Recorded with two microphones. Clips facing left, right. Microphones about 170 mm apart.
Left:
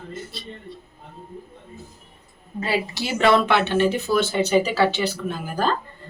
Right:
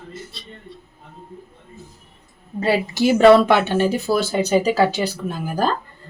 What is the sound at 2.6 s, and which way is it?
Speech, 40° right (ahead or behind).